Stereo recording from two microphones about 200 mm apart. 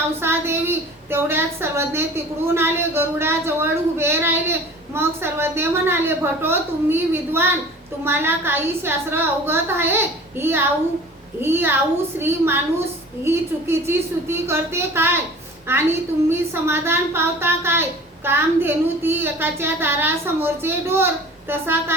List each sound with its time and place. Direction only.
0.2 s a woman's voice: 10° right (ahead or behind)